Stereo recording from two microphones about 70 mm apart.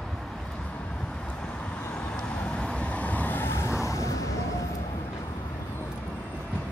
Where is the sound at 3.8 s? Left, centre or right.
Left.